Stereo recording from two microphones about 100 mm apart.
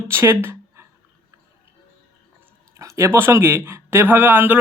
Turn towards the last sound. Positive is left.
turn(degrees=-20)  # may be behind; listen again after turning